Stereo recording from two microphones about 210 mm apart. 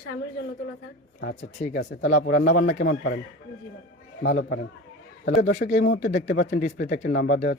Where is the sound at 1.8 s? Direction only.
55° left (ahead or behind).